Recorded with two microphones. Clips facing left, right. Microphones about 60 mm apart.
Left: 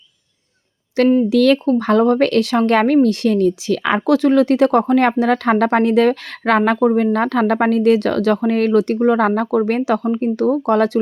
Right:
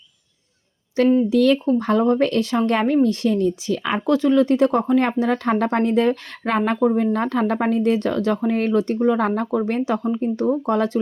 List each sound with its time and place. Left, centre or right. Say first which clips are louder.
1.0 s speech: left 3 dB; left
1.3 s speech: left 3 dB; left